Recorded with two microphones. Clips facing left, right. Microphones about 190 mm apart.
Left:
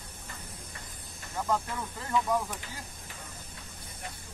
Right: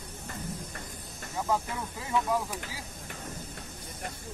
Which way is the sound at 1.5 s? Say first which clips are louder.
Even; 10° right (ahead or behind).